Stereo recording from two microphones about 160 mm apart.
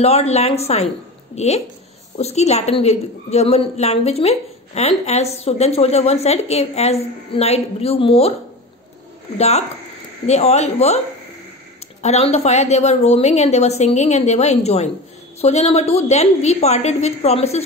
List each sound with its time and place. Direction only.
0.0 s a woman's voice: 40° left (ahead or behind)
9.4 s a woman's voice: 45° left (ahead or behind)
12.0 s a woman's voice: 40° left (ahead or behind)